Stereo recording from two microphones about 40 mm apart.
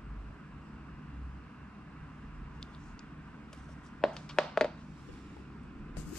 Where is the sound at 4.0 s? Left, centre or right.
Centre.